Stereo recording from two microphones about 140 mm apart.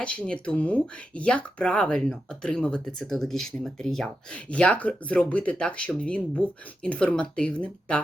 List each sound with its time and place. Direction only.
0.0 s speech: 10° left (ahead or behind)